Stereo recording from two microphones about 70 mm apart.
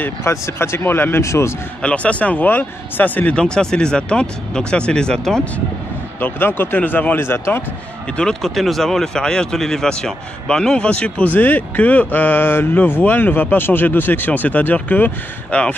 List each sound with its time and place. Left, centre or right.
0.0 s speech: left
1.8 s speech: centre
3.3 s speech: centre
6.1 s speech: left
8.2 s speech: centre